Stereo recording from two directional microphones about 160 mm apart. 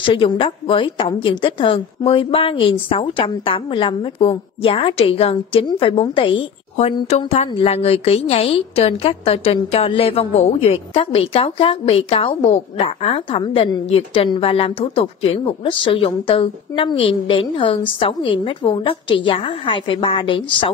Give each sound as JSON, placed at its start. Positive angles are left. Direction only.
{"t": 0.0, "sound": "a woman's voice", "side_deg": 30}